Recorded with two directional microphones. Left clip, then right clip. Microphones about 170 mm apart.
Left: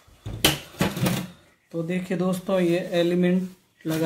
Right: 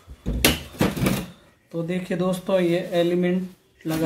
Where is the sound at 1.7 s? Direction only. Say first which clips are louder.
Right 1 dB; 5° right (ahead or behind).